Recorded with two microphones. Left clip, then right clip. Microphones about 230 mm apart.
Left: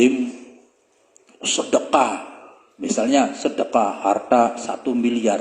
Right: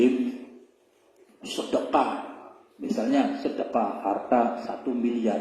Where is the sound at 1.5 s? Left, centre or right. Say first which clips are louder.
Left 6 dB; left.